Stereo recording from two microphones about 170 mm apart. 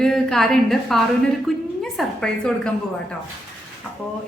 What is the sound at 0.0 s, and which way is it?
A woman's voice, 5° left (ahead or behind).